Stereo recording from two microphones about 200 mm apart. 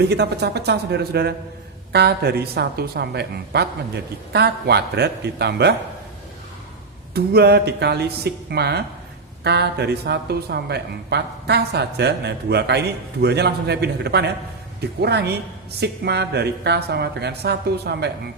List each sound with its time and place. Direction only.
0.0 s a woman's voice: 55° right (ahead or behind)
7.1 s a woman's voice: 55° right (ahead or behind)